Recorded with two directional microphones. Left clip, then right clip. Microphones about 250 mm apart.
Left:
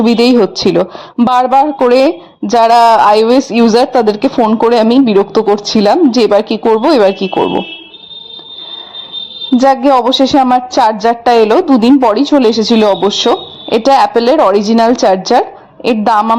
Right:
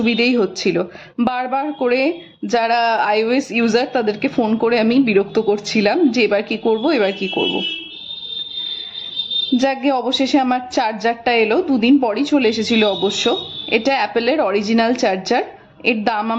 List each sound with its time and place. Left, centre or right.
0.0 s speech: left
9.6 s speech: left